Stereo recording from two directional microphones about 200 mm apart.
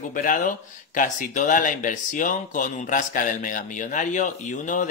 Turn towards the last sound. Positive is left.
turn(degrees=40)  # may be behind; listen again after turning